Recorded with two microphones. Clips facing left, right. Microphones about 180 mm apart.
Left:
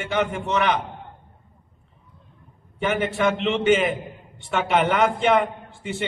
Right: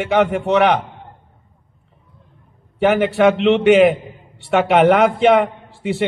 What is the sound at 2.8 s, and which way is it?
A man's voice, 65° right (ahead or behind).